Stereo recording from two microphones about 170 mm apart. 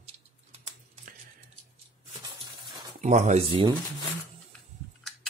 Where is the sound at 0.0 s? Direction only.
40° right (ahead or behind).